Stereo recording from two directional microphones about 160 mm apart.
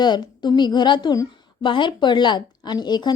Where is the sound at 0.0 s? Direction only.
25° left (ahead or behind).